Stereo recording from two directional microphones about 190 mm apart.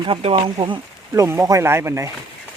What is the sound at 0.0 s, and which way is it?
Speech, 30° right (ahead or behind).